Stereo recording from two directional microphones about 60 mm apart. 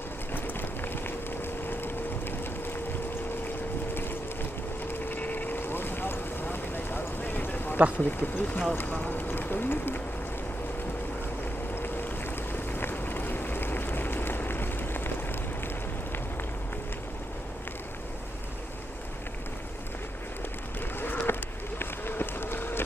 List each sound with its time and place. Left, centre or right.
0.3 s vehicle: left
5.1 s vehicle: left
8.0 s speech: left
12.5 s a sound: left
21.0 s run: left